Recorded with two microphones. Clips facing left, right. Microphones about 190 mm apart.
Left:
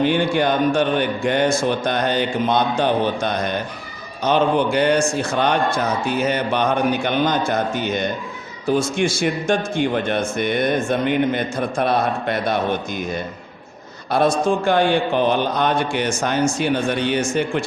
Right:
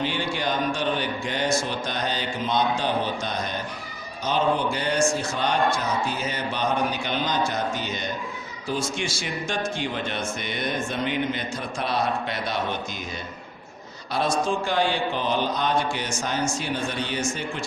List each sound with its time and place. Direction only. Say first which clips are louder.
0.0 s a man's voice: left 9 dB; 55° left (ahead or behind)
14.1 s a man's voice: left 7 dB; 55° left (ahead or behind)